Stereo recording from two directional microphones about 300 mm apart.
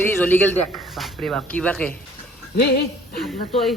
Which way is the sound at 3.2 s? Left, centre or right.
Centre.